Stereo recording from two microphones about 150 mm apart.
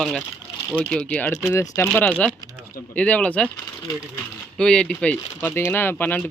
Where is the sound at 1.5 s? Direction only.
20° left (ahead or behind).